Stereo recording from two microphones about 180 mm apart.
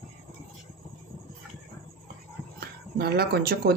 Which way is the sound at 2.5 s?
60° right (ahead or behind).